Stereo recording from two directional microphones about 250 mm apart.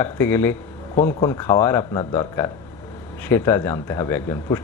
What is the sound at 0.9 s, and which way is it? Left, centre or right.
Speech, left.